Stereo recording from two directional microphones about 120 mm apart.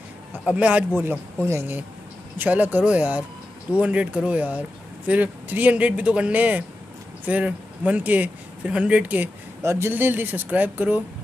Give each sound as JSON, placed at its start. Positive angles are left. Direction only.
{"t": 0.5, "sound": "speech", "side_deg": -10}